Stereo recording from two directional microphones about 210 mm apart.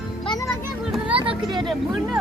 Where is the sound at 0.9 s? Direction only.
5° right (ahead or behind).